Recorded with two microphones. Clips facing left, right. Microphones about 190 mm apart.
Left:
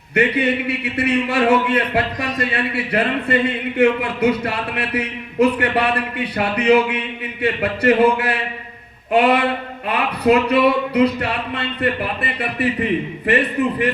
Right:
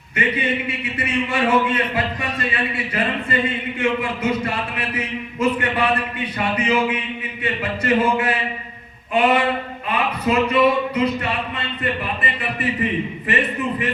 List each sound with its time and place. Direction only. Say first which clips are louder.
0.1 s speech: left 5 dB; 65° left (ahead or behind)